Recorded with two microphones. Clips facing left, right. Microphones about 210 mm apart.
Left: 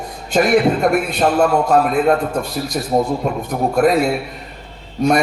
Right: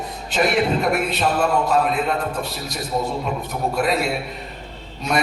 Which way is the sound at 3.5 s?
50° left (ahead or behind).